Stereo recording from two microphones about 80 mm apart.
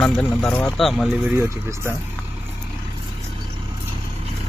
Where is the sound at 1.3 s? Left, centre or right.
Right.